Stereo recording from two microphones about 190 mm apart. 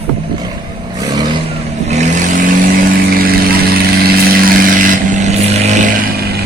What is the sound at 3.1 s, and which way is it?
Vehicle, 50° right (ahead or behind).